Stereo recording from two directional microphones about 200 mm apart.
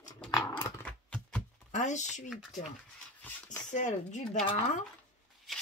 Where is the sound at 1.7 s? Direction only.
35° left (ahead or behind).